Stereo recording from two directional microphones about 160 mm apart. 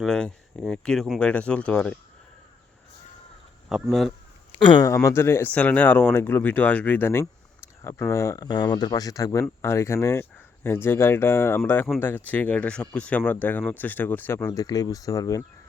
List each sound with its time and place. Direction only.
0.0 s speech: 5° left (ahead or behind)
3.7 s speech: centre (ahead or behind)
4.5 s speech: 30° left (ahead or behind)
5.0 s speech: 15° left (ahead or behind)